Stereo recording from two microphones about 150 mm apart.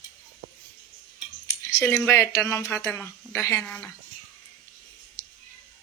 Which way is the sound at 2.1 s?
15° left (ahead or behind).